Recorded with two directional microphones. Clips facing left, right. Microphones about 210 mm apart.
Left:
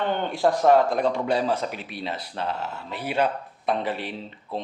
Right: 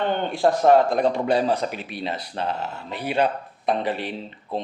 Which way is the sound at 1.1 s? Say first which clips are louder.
Right 3 dB; centre (ahead or behind).